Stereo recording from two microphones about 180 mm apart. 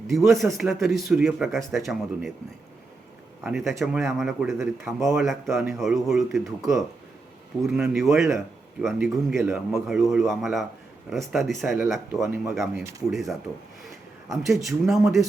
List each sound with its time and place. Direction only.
0.1 s a man's voice: centre (ahead or behind)
3.4 s a man's voice: centre (ahead or behind)
7.7 s a man's voice: centre (ahead or behind)